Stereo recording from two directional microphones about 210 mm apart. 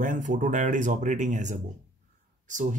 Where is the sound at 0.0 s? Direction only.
40° right (ahead or behind).